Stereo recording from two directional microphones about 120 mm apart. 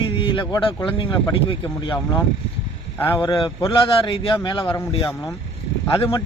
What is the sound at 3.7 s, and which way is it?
A man's voice, 50° left (ahead or behind).